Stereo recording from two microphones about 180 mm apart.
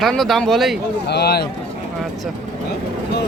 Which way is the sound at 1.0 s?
65° left (ahead or behind).